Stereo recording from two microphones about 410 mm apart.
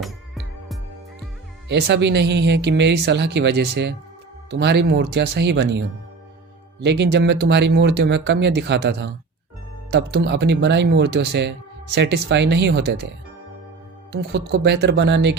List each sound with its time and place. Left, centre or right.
0.0 s music: centre
1.6 s speech: right
14.1 s speech: right